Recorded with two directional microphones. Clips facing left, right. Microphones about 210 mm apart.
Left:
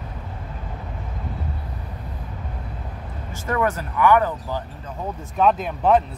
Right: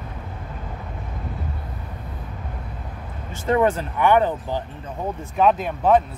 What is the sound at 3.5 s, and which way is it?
Speech, 30° right (ahead or behind).